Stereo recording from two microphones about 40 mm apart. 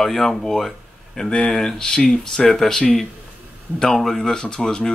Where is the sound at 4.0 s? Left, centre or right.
Centre.